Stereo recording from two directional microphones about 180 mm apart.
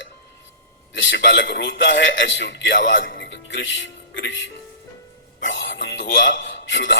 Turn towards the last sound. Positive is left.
turn(degrees=90)